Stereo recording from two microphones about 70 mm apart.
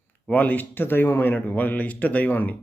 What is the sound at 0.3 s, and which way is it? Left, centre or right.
A man's voice, left.